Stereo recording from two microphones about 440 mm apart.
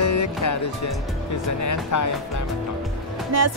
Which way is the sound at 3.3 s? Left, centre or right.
Right.